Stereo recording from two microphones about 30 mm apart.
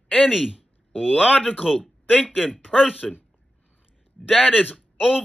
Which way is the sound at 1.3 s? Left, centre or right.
Left.